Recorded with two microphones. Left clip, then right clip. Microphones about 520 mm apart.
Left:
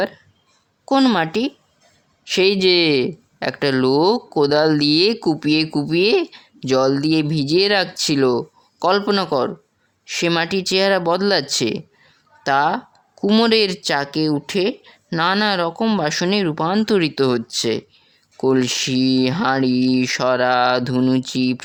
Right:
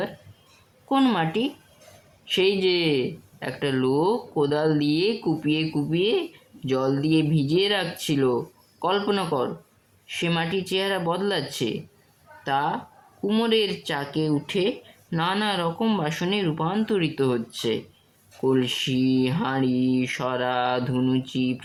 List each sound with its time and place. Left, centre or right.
0.9 s speech: centre